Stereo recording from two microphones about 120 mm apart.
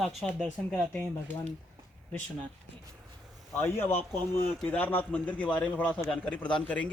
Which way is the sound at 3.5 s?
15° left (ahead or behind).